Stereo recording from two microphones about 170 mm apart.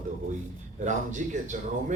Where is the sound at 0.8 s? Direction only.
45° right (ahead or behind).